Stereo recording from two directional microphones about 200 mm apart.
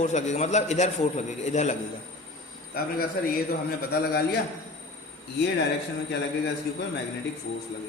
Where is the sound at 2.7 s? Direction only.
45° left (ahead or behind).